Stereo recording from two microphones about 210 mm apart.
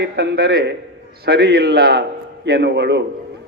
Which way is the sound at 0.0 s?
50° right (ahead or behind).